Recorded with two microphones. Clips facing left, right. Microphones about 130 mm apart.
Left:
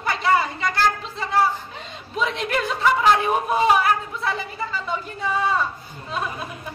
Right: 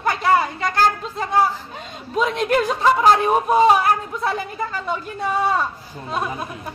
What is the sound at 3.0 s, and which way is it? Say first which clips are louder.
A man's voice: right 3 dB; 40° right (ahead or behind).